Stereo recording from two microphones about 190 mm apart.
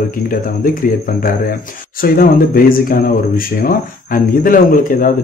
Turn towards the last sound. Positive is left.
turn(degrees=45)  # may be behind; listen again after turning